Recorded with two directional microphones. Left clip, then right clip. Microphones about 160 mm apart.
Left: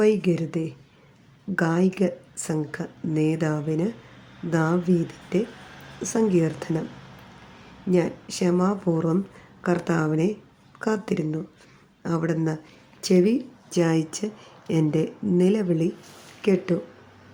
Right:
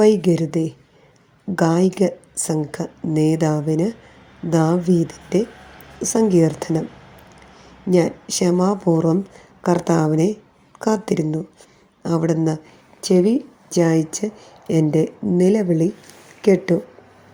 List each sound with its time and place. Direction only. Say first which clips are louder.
0.0 s a woman's voice: right 6 dB; 20° right (ahead or behind)
7.9 s a woman's voice: right 6 dB; 20° right (ahead or behind)